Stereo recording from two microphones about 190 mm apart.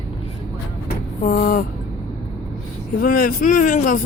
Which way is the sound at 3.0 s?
50° left (ahead or behind).